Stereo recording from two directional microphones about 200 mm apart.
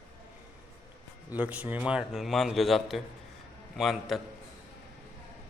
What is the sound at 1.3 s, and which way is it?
A man's voice, 5° right (ahead or behind).